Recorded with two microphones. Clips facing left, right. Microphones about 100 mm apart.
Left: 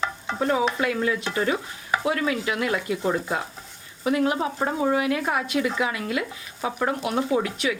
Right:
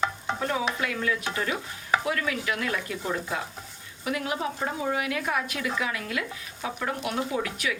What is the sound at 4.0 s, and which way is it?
Speech, 35° left (ahead or behind).